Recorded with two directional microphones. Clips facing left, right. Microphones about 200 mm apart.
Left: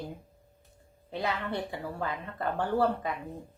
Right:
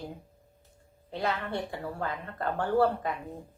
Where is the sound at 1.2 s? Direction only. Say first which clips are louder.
Right 1 dB; 15° left (ahead or behind).